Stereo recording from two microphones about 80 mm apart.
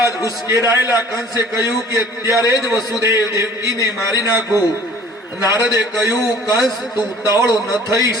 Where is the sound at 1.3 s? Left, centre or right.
Left.